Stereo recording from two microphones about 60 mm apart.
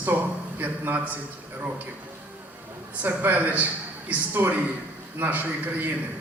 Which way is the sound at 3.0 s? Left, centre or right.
Right.